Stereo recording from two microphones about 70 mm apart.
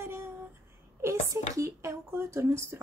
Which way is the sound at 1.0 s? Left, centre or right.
Right.